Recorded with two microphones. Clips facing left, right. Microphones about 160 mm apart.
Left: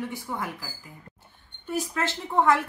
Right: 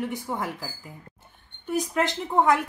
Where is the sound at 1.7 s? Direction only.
15° right (ahead or behind).